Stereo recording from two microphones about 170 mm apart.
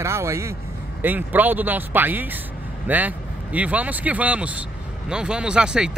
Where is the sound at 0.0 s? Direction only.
15° right (ahead or behind).